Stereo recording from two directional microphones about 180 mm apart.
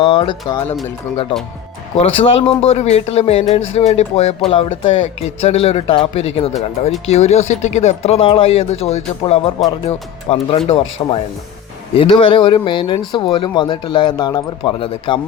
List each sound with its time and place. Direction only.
0.0 s speech: 30° left (ahead or behind)
1.3 s speech: 5° left (ahead or behind)
2.0 s speech: 35° left (ahead or behind)
11.0 s speech: 20° left (ahead or behind)